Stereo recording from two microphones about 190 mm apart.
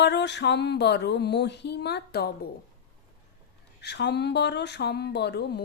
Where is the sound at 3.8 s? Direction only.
65° left (ahead or behind).